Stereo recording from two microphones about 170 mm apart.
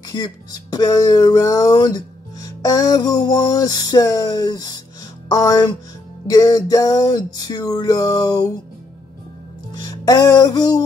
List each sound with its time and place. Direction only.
0.1 s speech: 20° left (ahead or behind)
9.7 s music: 20° left (ahead or behind)